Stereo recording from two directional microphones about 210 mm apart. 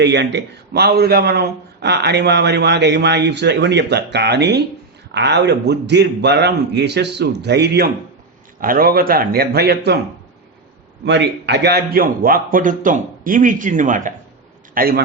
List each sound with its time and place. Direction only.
0.0 s a man's voice: 55° right (ahead or behind)
11.0 s a man's voice: 55° right (ahead or behind)